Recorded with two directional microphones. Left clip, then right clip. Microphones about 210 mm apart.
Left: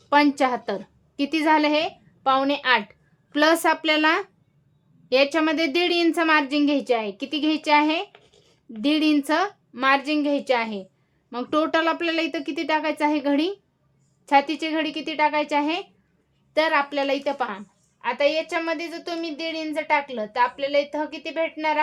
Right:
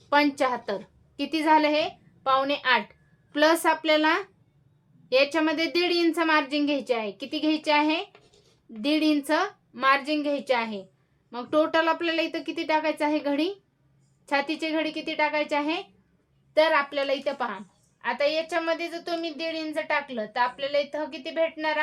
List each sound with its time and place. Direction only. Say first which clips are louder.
0.1 s a woman's voice: left 3 dB; 35° left (ahead or behind)